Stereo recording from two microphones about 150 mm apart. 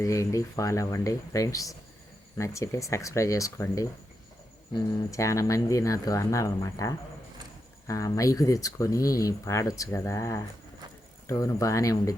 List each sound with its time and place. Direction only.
0.0 s speech: 20° left (ahead or behind)